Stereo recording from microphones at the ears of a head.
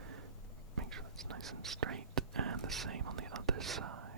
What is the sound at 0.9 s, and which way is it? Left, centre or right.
Whispering, right.